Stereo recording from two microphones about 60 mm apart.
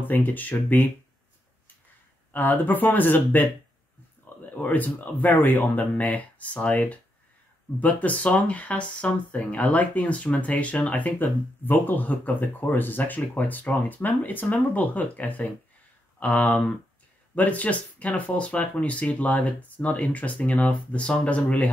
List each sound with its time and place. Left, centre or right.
0.0 s speech: left
2.3 s speech: left
4.5 s speech: left